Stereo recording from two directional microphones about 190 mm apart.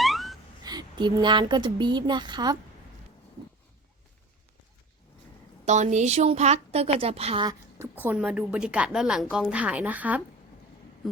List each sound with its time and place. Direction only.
0.0 s gasp: centre (ahead or behind)
0.6 s speech: 20° right (ahead or behind)
5.6 s a woman's voice: 40° right (ahead or behind)
7.8 s a woman's voice: 10° right (ahead or behind)